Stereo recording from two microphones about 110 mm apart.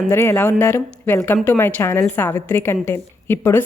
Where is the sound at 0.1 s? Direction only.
25° left (ahead or behind).